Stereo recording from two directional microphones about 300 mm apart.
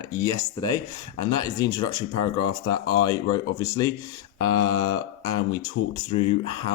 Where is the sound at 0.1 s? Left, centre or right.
Centre.